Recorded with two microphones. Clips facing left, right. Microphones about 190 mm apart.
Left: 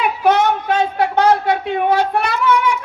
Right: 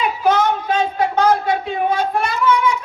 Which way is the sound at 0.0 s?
65° left (ahead or behind).